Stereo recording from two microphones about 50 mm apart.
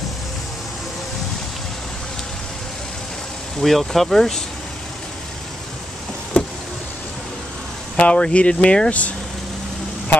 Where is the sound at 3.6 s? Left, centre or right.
Centre.